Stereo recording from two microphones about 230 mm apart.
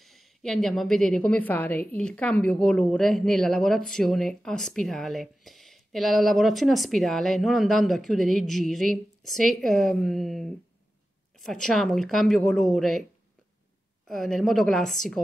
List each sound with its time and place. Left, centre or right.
0.0 s a woman's voice: centre
14.0 s a woman's voice: centre